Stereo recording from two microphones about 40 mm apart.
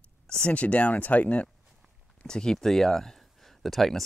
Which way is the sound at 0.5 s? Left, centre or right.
Left.